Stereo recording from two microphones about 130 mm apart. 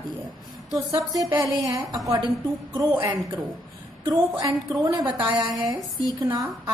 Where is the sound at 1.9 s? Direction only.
25° right (ahead or behind).